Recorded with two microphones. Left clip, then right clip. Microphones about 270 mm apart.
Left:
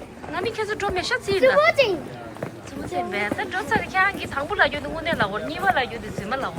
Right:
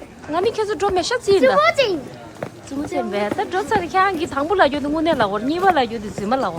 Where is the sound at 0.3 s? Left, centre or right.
Centre.